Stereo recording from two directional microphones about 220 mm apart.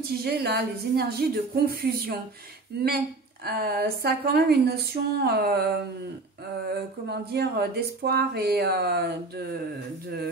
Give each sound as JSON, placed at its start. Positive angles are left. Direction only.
{"t": 0.2, "sound": "speech", "side_deg": -45}
{"t": 3.4, "sound": "speech", "side_deg": -45}